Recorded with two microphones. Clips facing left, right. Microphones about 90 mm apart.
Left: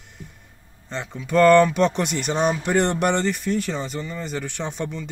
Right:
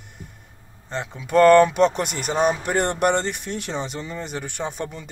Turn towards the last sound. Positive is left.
turn(degrees=-10)  # may be behind; listen again after turning